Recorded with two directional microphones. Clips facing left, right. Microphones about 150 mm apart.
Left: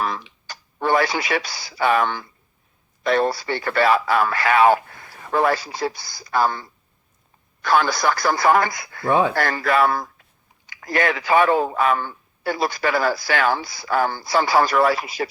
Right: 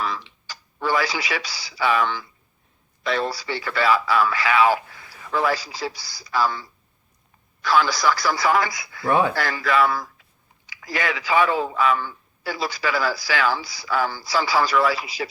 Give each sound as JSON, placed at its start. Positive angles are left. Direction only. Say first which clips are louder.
{"t": 0.4, "sound": "a man's voice", "louder": "left 3 dB", "side_deg": 55}
{"t": 9.0, "sound": "speech", "louder": "left 1 dB", "side_deg": 20}
{"t": 9.3, "sound": "a man's voice", "louder": "left 2 dB", "side_deg": 50}